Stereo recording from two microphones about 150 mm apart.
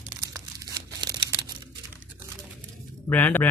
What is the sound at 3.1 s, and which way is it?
Speech, 10° left (ahead or behind).